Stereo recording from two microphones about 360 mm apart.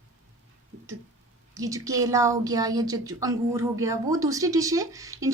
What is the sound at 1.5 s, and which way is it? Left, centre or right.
A woman's voice, centre.